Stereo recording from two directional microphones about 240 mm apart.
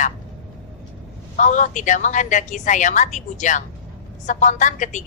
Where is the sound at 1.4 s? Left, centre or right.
Left.